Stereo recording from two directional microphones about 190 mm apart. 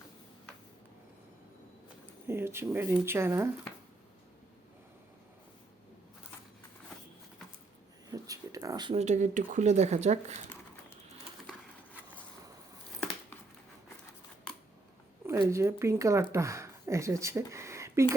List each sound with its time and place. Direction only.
2.2 s speech: 10° right (ahead or behind)
8.1 s a sound: 20° right (ahead or behind)
9.0 s speech: 40° right (ahead or behind)
15.3 s speech: 15° right (ahead or behind)